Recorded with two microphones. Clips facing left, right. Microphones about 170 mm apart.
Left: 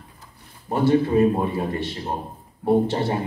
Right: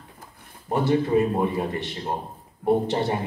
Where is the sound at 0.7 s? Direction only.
20° right (ahead or behind).